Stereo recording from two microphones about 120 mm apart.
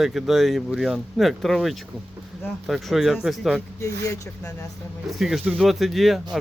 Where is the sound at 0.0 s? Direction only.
5° right (ahead or behind).